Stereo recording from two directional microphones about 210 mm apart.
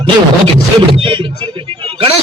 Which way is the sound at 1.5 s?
25° right (ahead or behind).